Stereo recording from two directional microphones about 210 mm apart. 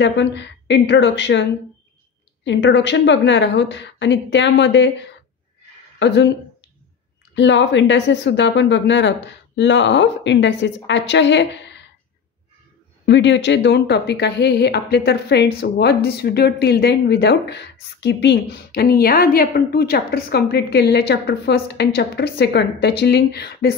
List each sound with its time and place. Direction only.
0.0 s a woman's voice: 55° left (ahead or behind)
2.4 s a woman's voice: 60° left (ahead or behind)
5.9 s a woman's voice: 60° left (ahead or behind)
7.3 s a woman's voice: 60° left (ahead or behind)
13.0 s speech: 55° left (ahead or behind)